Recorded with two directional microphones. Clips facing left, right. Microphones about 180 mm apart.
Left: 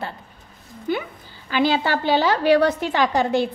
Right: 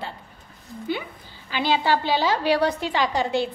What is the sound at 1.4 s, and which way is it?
A woman's voice, 50° left (ahead or behind).